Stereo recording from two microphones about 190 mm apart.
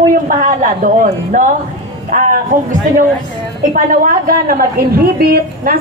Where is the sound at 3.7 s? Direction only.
45° right (ahead or behind).